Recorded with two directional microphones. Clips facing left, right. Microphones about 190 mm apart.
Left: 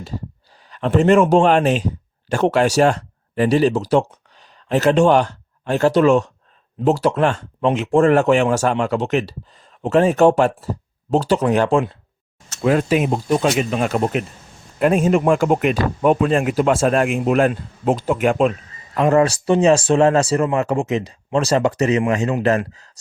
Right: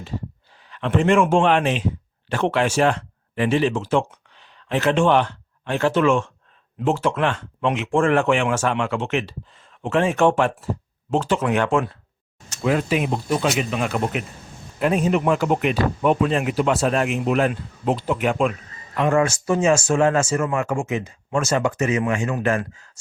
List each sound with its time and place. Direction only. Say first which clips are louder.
0.7 s speech: left 4 dB; 40° left (ahead or behind)
12.6 s speech: left 4 dB; 45° left (ahead or behind)
14.8 s speech: left 4 dB; 50° left (ahead or behind)